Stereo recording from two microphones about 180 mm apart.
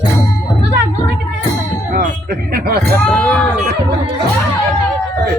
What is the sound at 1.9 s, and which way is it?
Speech, 60° right (ahead or behind).